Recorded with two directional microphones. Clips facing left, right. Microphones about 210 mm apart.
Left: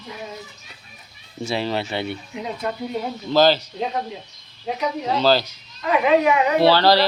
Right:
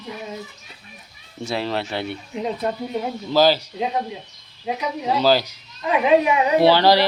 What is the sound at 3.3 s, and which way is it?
A child's voice, 10° right (ahead or behind).